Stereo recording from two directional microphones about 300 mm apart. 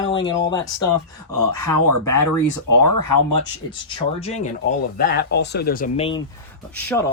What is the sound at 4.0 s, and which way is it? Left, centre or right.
Speech, left.